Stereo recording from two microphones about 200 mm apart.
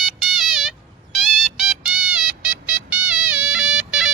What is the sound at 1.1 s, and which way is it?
Music, centre (ahead or behind).